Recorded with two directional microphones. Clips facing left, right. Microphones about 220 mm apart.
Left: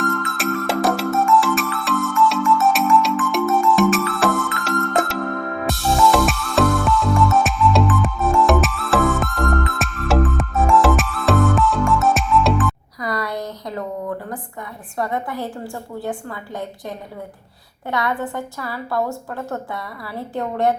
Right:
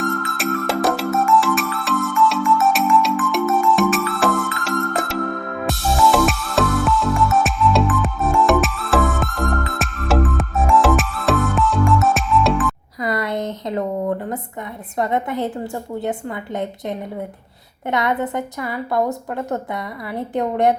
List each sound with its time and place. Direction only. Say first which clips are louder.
0.3 s music: even; centre (ahead or behind)
13.0 s a sound: right 4 dB; 25° right (ahead or behind)
14.9 s a woman's voice: right 3 dB; 20° right (ahead or behind)